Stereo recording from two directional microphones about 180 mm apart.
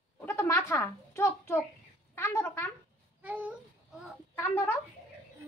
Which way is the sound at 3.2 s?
10° right (ahead or behind).